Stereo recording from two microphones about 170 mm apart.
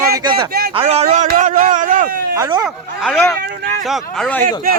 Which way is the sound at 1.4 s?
50° right (ahead or behind).